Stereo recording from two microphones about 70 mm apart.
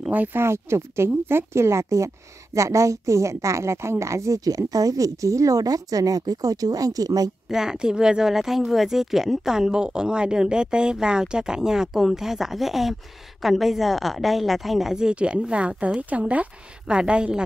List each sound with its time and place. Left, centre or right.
0.1 s speech: right
0.4 s a woman's voice: right
7.4 s speech: centre